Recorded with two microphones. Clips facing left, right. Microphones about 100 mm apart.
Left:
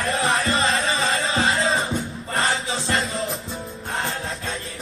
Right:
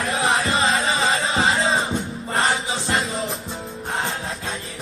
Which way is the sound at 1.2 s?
25° right (ahead or behind).